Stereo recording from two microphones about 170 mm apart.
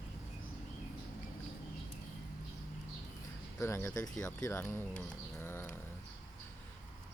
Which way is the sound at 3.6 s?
15° left (ahead or behind).